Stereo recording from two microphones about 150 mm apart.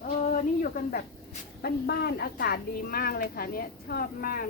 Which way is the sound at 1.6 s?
90° left.